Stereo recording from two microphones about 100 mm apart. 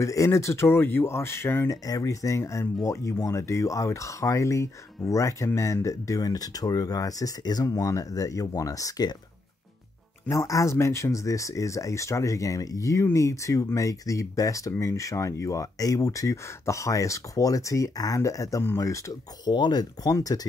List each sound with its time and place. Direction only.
0.0 s speech: 30° left (ahead or behind)
1.7 s speech: 35° left (ahead or behind)
10.3 s speech: 35° left (ahead or behind)
19.5 s speech: 45° left (ahead or behind)